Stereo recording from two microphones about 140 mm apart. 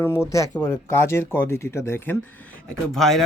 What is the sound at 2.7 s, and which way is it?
Speech, 5° left (ahead or behind).